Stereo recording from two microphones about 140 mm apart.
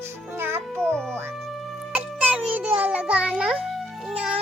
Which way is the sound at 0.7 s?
5° left (ahead or behind).